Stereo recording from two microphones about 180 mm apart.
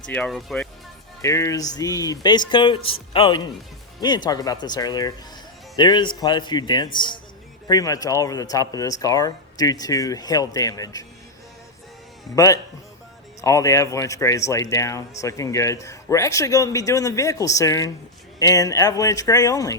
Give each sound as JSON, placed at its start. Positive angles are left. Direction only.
{"t": 0.1, "sound": "speech", "side_deg": 5}
{"t": 1.2, "sound": "speech", "side_deg": 15}
{"t": 13.4, "sound": "speech", "side_deg": 15}